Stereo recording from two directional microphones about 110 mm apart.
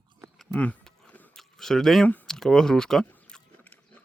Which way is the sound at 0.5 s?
15° left (ahead or behind).